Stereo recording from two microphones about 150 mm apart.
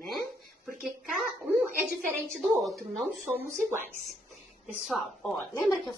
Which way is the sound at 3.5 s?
60° right (ahead or behind).